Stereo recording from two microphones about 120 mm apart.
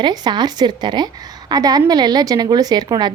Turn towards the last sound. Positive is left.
turn(degrees=-35)  # may be behind; listen again after turning